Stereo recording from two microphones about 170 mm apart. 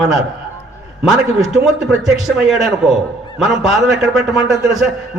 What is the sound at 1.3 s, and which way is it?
A man's voice, centre (ahead or behind).